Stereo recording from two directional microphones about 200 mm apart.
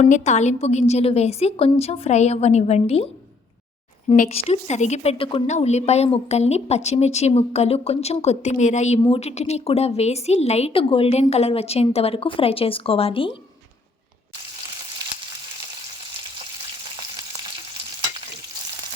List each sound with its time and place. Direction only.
0.0 s a woman's voice: 35° left (ahead or behind)
4.1 s a woman's voice: 35° left (ahead or behind)